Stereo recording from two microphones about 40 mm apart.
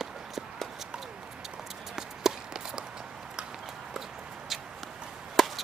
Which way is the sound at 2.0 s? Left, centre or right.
Centre.